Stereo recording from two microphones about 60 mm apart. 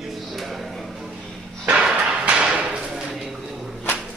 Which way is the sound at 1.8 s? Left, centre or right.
Centre.